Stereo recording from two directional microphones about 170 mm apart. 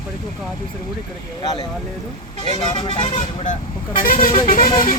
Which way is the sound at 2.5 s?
25° left (ahead or behind).